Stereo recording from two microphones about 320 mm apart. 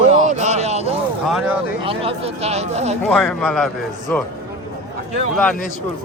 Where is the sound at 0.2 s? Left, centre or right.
Right.